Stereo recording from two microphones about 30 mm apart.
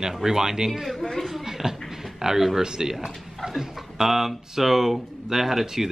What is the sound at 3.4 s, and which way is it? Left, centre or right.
Speech, centre.